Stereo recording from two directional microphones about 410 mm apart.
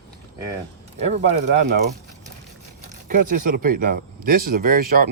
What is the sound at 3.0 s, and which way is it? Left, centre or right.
Speech, centre.